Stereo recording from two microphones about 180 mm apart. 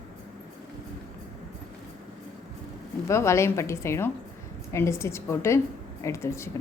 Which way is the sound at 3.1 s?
15° left (ahead or behind).